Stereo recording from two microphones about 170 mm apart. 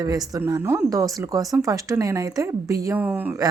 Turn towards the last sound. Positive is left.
turn(degrees=-10)  # may be behind; listen again after turning